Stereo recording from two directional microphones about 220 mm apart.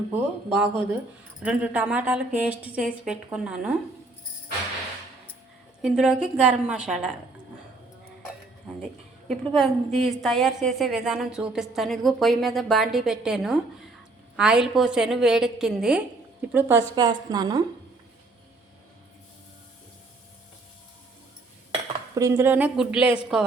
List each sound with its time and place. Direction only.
0.1 s a woman's voice: 5° right (ahead or behind)
5.8 s a woman's voice: 5° right (ahead or behind)
9.3 s a woman's voice: centre (ahead or behind)
16.9 s a woman's voice: 20° right (ahead or behind)
22.1 s a woman's voice: 15° right (ahead or behind)